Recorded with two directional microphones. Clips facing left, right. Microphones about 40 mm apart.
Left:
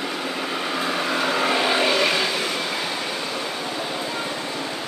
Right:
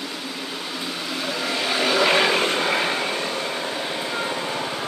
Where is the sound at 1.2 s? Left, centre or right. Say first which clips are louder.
Left 4 dB; left.